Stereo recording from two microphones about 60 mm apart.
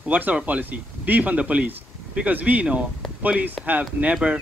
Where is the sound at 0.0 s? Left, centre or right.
Right.